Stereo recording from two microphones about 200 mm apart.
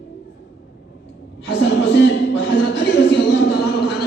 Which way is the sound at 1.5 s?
60° left (ahead or behind).